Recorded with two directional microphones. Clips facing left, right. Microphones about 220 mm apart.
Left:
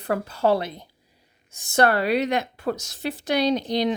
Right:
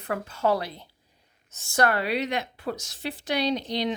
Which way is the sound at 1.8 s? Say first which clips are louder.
Left 4 dB; 35° left (ahead or behind).